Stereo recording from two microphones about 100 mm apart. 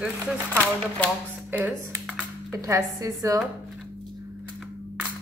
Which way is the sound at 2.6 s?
35° right (ahead or behind).